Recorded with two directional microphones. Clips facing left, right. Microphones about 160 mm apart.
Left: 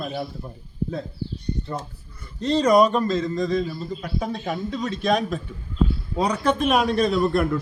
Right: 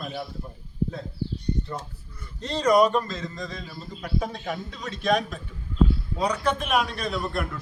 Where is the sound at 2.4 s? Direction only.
25° left (ahead or behind).